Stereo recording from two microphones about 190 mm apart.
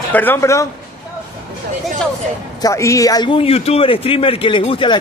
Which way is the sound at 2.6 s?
15° left (ahead or behind).